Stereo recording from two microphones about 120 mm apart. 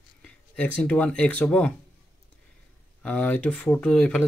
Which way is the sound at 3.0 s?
10° left (ahead or behind).